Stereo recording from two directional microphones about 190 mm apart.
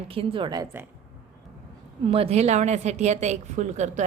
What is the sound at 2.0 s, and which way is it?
A woman's voice, 30° right (ahead or behind).